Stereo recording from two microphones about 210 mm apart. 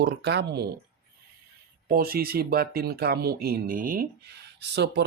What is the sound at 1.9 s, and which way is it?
Speech, 45° right (ahead or behind).